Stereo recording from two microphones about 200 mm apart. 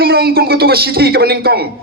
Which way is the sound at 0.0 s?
50° right (ahead or behind).